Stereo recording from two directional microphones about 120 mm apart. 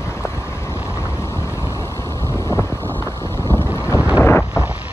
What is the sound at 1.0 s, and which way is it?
Vehicle, 20° left (ahead or behind).